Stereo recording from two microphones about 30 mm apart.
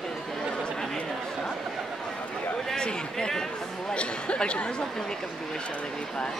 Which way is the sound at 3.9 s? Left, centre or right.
Left.